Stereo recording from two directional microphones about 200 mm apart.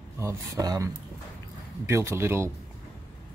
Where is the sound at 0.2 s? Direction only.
15° right (ahead or behind).